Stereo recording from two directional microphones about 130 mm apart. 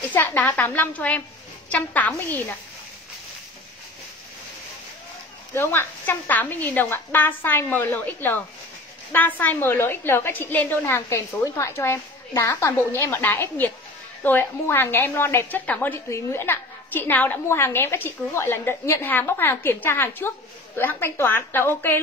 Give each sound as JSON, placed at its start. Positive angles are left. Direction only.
{"t": 0.0, "sound": "a woman's voice", "side_deg": 15}
{"t": 5.5, "sound": "a woman's voice", "side_deg": 15}